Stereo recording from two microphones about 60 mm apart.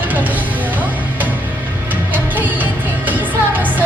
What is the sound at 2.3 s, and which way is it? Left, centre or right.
Music, right.